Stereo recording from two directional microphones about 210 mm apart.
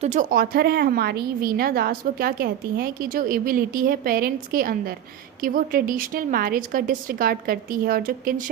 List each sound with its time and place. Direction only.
0.0 s a woman's voice: 35° right (ahead or behind)